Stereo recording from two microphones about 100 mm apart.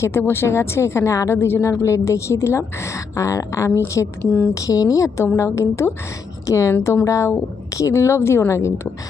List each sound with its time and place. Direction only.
0.0 s a woman's voice: 25° left (ahead or behind)